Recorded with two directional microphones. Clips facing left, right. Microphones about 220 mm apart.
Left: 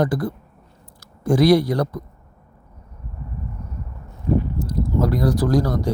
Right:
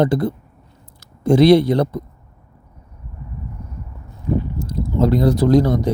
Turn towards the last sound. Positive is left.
turn(degrees=-20)  # may be behind; listen again after turning